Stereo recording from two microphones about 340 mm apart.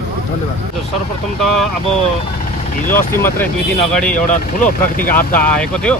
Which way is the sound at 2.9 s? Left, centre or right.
Centre.